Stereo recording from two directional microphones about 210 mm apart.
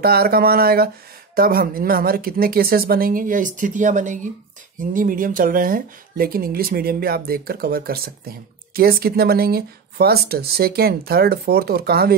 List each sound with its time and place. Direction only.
0.0 s speech: 45° right (ahead or behind)